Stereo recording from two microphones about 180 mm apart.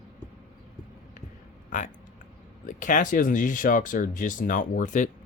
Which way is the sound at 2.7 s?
45° left (ahead or behind).